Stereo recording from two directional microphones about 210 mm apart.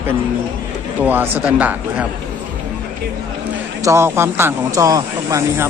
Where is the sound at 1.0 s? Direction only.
10° right (ahead or behind).